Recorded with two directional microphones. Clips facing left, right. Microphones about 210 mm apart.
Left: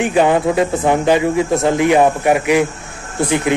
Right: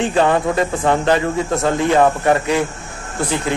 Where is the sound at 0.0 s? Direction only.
15° left (ahead or behind).